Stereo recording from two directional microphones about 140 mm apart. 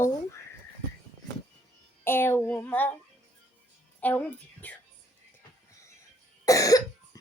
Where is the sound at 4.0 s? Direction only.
10° left (ahead or behind).